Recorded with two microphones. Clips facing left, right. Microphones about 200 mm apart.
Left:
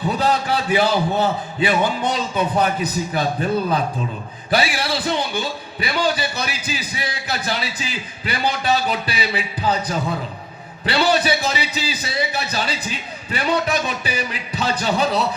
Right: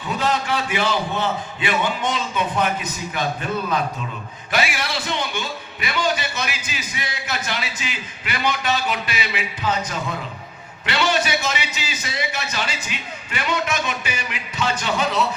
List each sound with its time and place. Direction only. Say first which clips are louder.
0.0 s a man's voice: left 3 dB; 35° left (ahead or behind)